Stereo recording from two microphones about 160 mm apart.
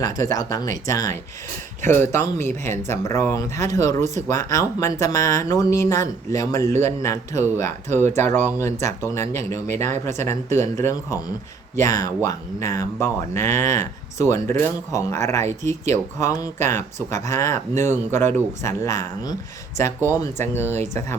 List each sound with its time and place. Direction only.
0.0 s speech: 20° left (ahead or behind)
20.2 s speech: 15° left (ahead or behind)